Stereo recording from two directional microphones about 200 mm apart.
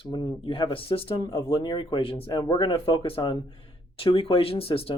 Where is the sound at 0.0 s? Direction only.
20° left (ahead or behind).